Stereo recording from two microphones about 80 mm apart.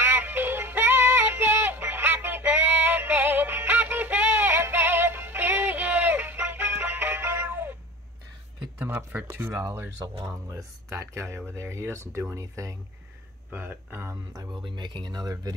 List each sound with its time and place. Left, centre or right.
0.0 s synthetic singing: right
8.7 s speech: right
13.5 s speech: right
14.0 s speech: right
14.6 s speech: right